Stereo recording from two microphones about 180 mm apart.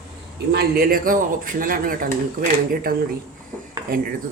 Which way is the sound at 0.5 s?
60° right (ahead or behind).